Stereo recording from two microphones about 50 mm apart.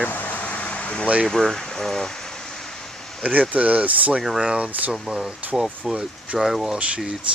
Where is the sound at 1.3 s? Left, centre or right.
Centre.